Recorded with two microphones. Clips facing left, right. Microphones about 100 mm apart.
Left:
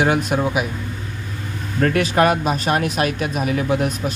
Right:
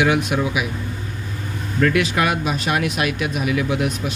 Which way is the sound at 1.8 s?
40° left (ahead or behind).